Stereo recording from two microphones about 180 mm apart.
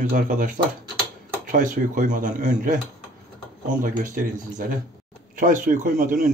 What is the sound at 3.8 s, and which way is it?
Speech, 45° right (ahead or behind).